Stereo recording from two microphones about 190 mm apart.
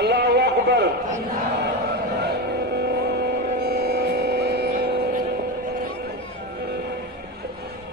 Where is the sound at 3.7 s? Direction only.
55° right (ahead or behind).